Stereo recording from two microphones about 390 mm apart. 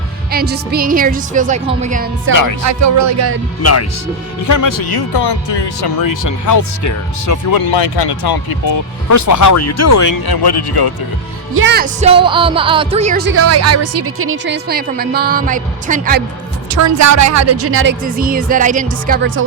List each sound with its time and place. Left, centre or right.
0.3 s speech: right
2.3 s music: left
2.6 s music: right
3.6 s a man's voice: left
4.4 s speech: left
7.7 s speech: left
11.5 s speech: right
16.6 s speech: right